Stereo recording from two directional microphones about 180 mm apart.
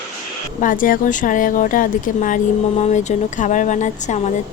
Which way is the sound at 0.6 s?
50° left (ahead or behind).